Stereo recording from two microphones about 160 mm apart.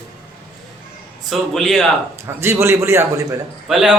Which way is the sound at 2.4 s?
15° right (ahead or behind).